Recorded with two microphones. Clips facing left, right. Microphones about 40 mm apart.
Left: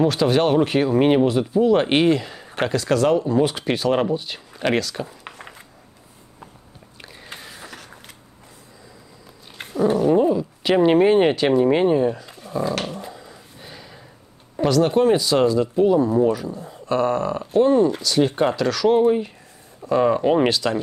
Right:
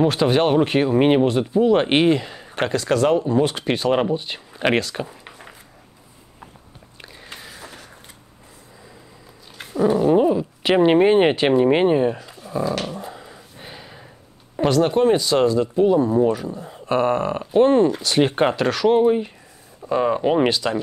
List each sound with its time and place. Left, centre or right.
0.0 s speech: centre
7.2 s a sound: centre
9.9 s speech: right
12.3 s dog: centre
13.0 s a sound: right
14.8 s speech: centre; by 18.5 s right
18.6 s speech: right